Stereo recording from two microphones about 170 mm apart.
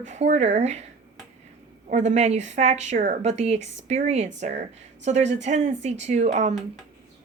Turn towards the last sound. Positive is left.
turn(degrees=-45)  # may be behind; listen again after turning